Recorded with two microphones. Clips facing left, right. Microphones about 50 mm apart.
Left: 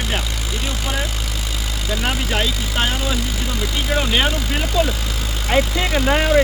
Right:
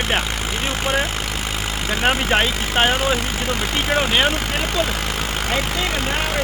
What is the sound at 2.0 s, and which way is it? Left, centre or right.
Speech, right.